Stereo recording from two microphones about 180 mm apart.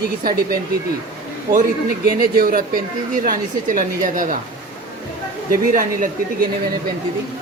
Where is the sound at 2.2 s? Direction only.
55° right (ahead or behind).